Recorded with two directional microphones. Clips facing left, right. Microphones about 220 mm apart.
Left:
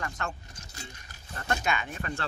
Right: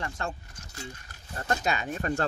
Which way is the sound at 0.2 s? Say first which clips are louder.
Right 2 dB; 30° right (ahead or behind).